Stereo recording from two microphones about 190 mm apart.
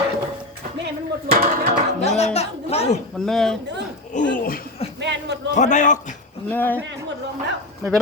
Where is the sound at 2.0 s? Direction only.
35° left (ahead or behind).